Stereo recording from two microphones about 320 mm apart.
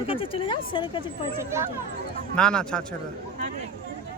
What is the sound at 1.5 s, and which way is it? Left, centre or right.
Speech, centre.